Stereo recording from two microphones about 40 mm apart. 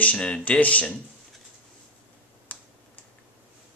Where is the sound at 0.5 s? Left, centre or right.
Left.